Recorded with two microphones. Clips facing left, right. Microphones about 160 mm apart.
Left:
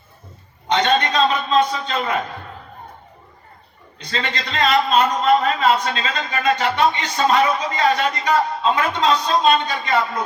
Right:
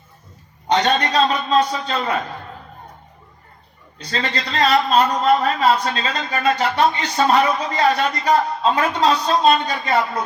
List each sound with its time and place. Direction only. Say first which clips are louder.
0.7 s a man's voice: even; 40° right (ahead or behind)
3.9 s a man's voice: right 1 dB; 40° right (ahead or behind)